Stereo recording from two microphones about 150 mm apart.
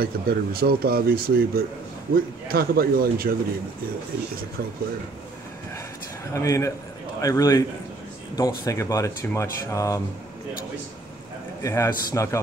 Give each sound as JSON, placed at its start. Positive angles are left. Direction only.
{"t": 0.0, "sound": "speech", "side_deg": -80}
{"t": 6.3, "sound": "speech", "side_deg": 20}
{"t": 11.6, "sound": "speech", "side_deg": 20}